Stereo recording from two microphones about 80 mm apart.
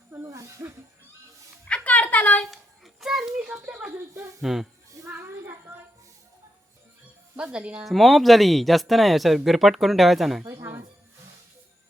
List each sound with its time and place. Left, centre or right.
0.3 s snake: right
1.6 s a sound: centre
2.5 s child singing: centre
3.7 s speech: centre
4.1 s speech: right
4.4 s speech: centre
5.1 s a sound: right
7.3 s speech: centre
7.9 s speech: centre
10.5 s music: right